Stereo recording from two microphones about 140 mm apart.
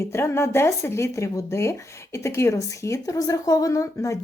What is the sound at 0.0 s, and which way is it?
Speech, 20° left (ahead or behind).